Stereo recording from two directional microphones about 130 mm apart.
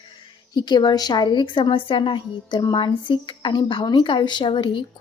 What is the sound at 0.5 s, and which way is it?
A woman's voice, 35° left (ahead or behind).